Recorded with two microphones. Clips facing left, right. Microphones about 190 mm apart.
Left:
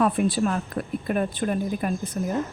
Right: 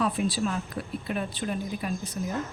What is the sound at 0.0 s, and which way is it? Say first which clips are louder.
Speech: left 5 dB; 55° left (ahead or behind).